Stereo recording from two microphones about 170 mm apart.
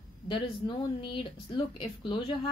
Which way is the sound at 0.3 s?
30° left (ahead or behind).